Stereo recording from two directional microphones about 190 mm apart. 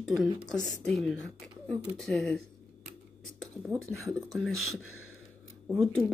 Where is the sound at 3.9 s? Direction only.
Centre (ahead or behind).